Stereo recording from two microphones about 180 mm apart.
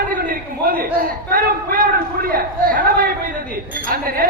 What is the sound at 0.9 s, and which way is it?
A woman's voice, 50° right (ahead or behind).